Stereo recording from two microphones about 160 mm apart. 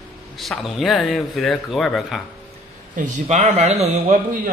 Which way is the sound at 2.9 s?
50° right (ahead or behind).